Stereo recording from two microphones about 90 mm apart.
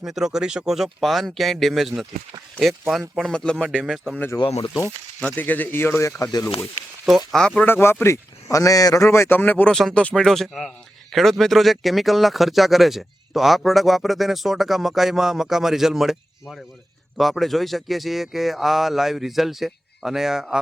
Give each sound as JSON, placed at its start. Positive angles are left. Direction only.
{"t": 0.0, "sound": "speech", "side_deg": -5}
{"t": 5.2, "sound": "speech", "side_deg": 15}
{"t": 7.3, "sound": "speech", "side_deg": 5}
{"t": 7.6, "sound": "speech", "side_deg": 25}
{"t": 9.0, "sound": "speech", "side_deg": 30}
{"t": 9.7, "sound": "speech", "side_deg": 10}